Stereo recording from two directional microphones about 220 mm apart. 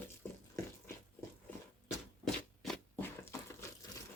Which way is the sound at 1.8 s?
Centre (ahead or behind).